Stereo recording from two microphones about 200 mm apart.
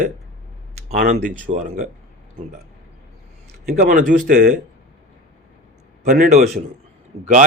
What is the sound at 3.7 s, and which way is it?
Speech, 45° right (ahead or behind).